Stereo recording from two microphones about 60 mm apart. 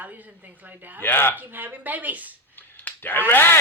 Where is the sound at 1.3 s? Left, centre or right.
Right.